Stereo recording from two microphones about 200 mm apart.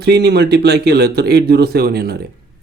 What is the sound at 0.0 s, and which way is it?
Speech, 55° right (ahead or behind).